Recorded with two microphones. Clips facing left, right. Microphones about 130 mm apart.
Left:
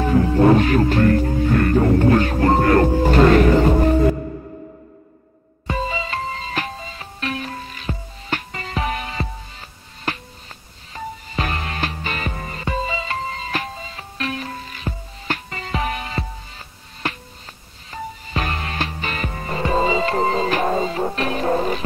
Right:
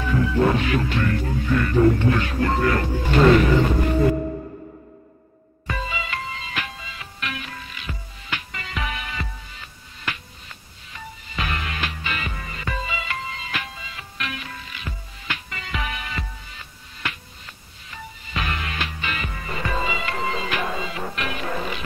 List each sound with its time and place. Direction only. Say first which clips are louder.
0.0 s music: left 5 dB; 40° left (ahead or behind)
5.7 s music: left 5 dB; 30° left (ahead or behind)